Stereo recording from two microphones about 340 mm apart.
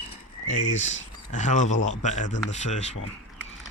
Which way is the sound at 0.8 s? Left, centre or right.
Left.